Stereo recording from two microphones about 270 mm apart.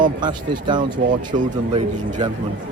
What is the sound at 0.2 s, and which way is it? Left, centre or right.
Speech, centre.